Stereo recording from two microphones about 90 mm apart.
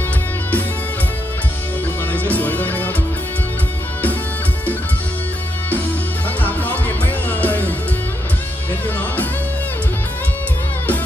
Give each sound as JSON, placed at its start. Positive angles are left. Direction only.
{"t": 2.1, "sound": "music", "side_deg": 20}
{"t": 6.4, "sound": "music", "side_deg": 20}